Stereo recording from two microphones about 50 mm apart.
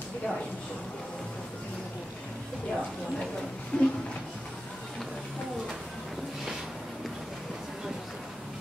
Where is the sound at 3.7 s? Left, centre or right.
Left.